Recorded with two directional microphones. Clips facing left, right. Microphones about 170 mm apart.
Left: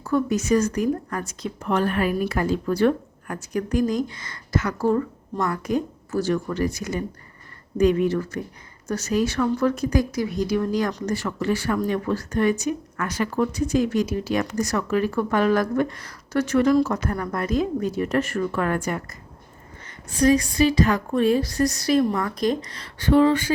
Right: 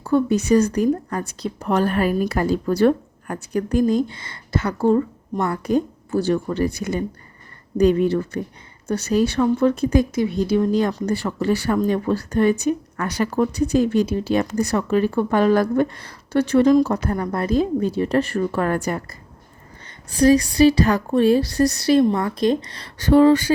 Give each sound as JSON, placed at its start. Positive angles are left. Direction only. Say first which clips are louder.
{"t": 0.0, "sound": "a woman's voice", "louder": "right 4 dB", "side_deg": -30}
{"t": 6.7, "sound": "speech", "louder": "right 3 dB", "side_deg": -60}
{"t": 7.8, "sound": "a woman's voice", "louder": "right 3 dB", "side_deg": -30}